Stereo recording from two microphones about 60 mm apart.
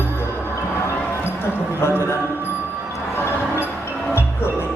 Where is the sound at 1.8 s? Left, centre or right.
Left.